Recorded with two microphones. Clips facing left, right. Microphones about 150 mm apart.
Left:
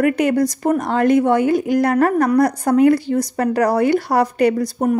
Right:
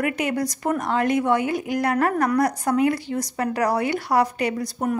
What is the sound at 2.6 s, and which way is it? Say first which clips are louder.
Speech: left 7 dB; 45° left (ahead or behind).